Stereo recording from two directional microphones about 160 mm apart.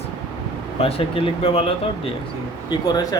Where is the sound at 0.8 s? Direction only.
35° left (ahead or behind).